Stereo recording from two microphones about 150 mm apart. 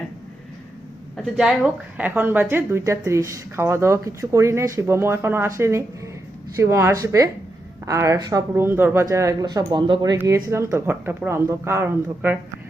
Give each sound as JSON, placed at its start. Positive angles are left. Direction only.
{"t": 1.1, "sound": "a woman's voice", "side_deg": -5}
{"t": 10.2, "sound": "a woman's voice", "side_deg": -20}